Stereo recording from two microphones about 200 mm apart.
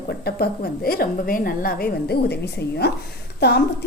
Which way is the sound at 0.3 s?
50° left (ahead or behind).